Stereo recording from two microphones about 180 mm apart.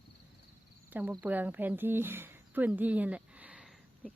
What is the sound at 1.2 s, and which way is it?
Speech, 10° right (ahead or behind).